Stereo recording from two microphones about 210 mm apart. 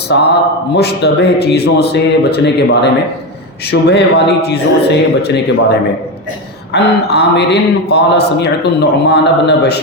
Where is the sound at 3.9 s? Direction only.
50° left (ahead or behind).